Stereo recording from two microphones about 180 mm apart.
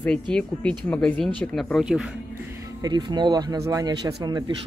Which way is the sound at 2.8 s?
25° right (ahead or behind).